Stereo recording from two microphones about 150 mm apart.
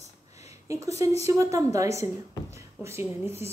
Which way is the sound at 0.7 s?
20° right (ahead or behind).